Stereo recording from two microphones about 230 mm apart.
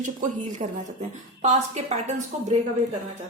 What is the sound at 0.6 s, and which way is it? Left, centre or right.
A woman's voice, right.